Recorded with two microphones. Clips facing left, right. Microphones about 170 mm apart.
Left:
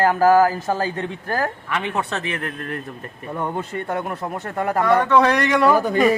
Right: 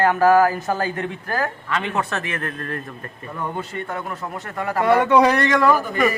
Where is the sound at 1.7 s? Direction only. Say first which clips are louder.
Even; 15° left (ahead or behind).